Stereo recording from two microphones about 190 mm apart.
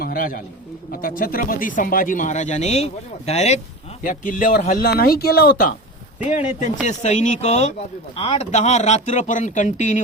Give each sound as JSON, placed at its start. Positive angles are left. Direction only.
{"t": 0.0, "sound": "a man's voice", "side_deg": 50}